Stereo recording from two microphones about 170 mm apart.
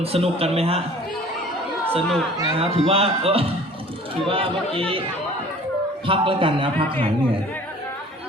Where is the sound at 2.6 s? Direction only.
35° right (ahead or behind).